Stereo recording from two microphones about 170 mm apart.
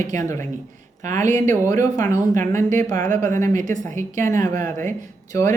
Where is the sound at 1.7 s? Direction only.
20° left (ahead or behind).